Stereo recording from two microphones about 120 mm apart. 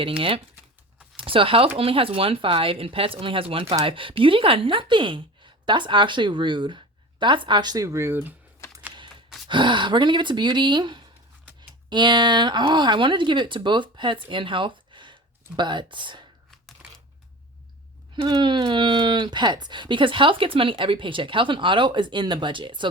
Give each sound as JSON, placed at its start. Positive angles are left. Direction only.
{"t": 0.2, "sound": "speech", "side_deg": -50}
{"t": 9.5, "sound": "speech", "side_deg": -40}
{"t": 18.2, "sound": "speech", "side_deg": -40}